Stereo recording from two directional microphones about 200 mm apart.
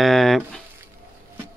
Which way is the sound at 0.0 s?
Centre (ahead or behind).